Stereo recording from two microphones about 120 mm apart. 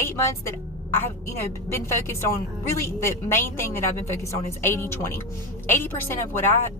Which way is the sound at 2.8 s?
20° left (ahead or behind).